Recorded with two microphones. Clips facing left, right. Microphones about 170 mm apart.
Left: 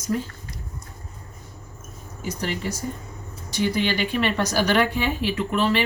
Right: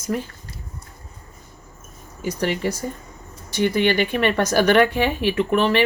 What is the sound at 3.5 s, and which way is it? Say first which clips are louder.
A woman's voice: right 4 dB; 55° right (ahead or behind).